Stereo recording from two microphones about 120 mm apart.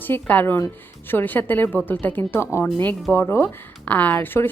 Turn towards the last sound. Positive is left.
turn(degrees=15)  # may be behind; listen again after turning